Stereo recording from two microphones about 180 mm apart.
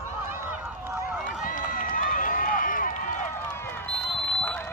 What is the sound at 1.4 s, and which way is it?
Run, 50° left (ahead or behind).